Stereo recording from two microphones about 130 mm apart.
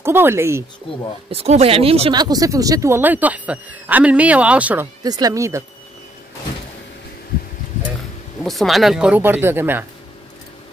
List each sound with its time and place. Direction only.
0.0 s speech: 20° right (ahead or behind)
1.3 s speech: 50° right (ahead or behind)
2.1 s speech: 30° right (ahead or behind); by 4.8 s 10° right (ahead or behind)
5.0 s speech: 30° right (ahead or behind)
8.5 s speech: centre (ahead or behind); by 9.8 s 15° right (ahead or behind)